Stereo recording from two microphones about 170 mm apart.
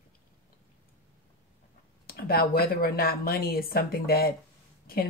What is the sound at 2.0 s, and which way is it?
A woman's voice, 60° left (ahead or behind).